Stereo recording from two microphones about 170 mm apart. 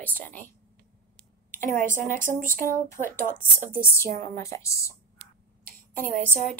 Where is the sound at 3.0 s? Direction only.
50° right (ahead or behind).